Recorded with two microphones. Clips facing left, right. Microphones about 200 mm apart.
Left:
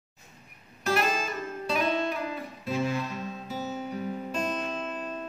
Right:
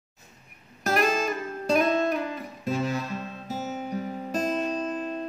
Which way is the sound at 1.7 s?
45° right (ahead or behind).